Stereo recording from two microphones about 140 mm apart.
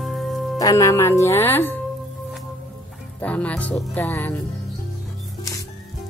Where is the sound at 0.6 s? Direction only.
25° left (ahead or behind).